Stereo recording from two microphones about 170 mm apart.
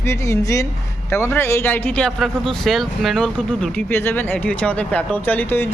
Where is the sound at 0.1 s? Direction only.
15° left (ahead or behind).